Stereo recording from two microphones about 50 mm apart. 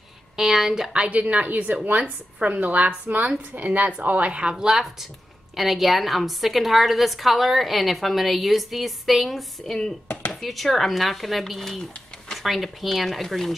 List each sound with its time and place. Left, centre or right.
0.4 s a woman's voice: centre
1.0 s a woman's voice: right
5.6 s a woman's voice: centre